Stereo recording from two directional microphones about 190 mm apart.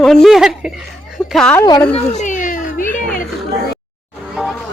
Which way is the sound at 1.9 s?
40° left (ahead or behind).